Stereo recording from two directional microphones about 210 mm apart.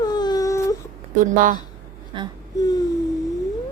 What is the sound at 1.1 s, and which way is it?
Speech, 40° right (ahead or behind).